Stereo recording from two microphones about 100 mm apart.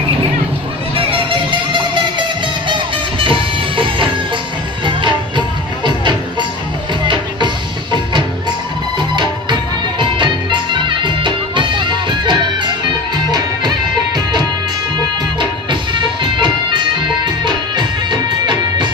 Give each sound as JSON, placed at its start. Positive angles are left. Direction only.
{"t": 0.9, "sound": "music", "side_deg": -60}
{"t": 7.1, "sound": "music", "side_deg": -50}
{"t": 15.7, "sound": "music", "side_deg": -50}